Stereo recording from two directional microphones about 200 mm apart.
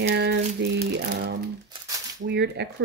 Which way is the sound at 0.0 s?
55° right (ahead or behind).